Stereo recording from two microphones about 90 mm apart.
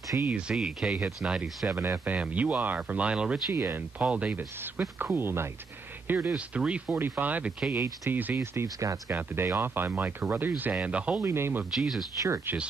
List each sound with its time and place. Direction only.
0.2 s speech: 15° right (ahead or behind)
1.8 s speech: 20° right (ahead or behind)
3.5 s speech: 25° right (ahead or behind)
4.0 s speech: 15° right (ahead or behind)
8.4 s speech: 35° right (ahead or behind)
9.1 s speech: 25° right (ahead or behind)
11.2 s speech: 30° right (ahead or behind)
11.7 s speech: 5° right (ahead or behind)